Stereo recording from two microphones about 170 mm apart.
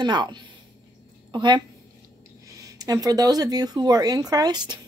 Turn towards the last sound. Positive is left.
turn(degrees=-25)  # may be behind; listen again after turning